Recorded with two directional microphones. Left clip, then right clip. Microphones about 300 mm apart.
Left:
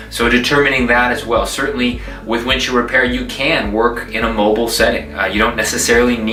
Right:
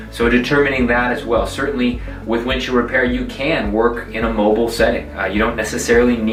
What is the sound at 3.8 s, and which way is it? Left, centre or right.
Speech, centre.